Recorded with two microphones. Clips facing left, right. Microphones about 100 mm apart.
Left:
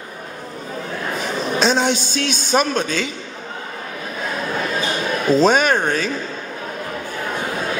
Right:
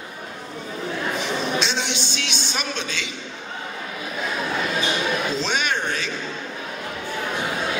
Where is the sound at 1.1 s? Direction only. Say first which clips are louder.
Left 4 dB; 40° left (ahead or behind).